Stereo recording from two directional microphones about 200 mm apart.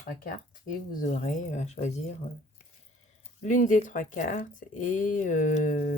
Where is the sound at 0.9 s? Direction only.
40° left (ahead or behind).